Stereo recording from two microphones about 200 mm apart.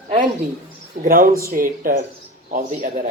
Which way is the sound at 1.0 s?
45° right (ahead or behind).